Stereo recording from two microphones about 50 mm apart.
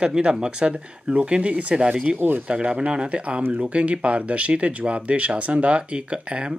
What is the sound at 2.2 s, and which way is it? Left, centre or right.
Speech, right.